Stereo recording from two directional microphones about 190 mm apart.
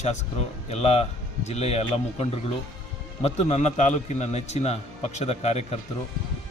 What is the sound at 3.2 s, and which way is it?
A man's voice, 35° left (ahead or behind).